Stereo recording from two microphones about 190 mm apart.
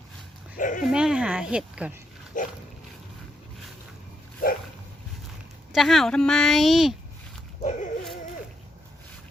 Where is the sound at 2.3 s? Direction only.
45° left (ahead or behind).